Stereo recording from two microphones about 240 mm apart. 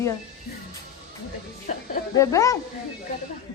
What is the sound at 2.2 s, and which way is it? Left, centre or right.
Speech, centre.